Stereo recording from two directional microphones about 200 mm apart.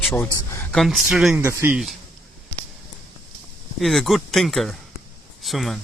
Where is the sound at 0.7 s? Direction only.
Centre (ahead or behind).